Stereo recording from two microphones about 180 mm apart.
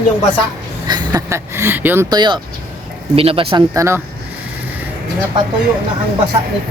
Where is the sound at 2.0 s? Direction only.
25° right (ahead or behind).